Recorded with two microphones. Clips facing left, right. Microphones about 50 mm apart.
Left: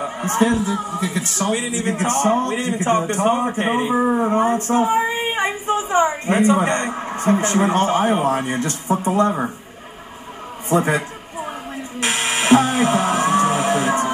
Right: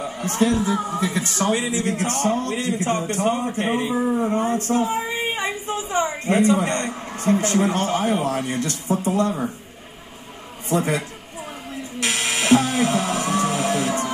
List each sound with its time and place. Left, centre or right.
0.0 s speech: left
0.6 s speech: centre
1.9 s a man's voice: left
10.8 s a sound: left
12.0 s music: left